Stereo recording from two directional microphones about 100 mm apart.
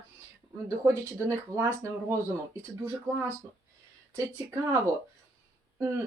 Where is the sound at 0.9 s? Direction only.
30° right (ahead or behind).